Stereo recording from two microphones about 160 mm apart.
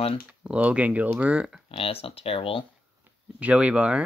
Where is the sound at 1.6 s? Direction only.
35° left (ahead or behind).